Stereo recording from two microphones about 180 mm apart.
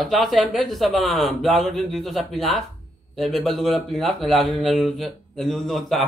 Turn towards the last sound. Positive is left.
turn(degrees=0)  # may be behind; listen again after turning